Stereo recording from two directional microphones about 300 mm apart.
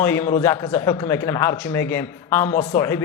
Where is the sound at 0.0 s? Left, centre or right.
Centre.